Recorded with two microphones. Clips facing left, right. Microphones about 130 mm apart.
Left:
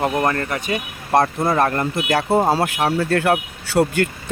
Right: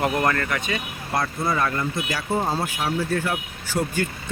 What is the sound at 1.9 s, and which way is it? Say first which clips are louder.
Speech: left 8 dB; 65° left (ahead or behind).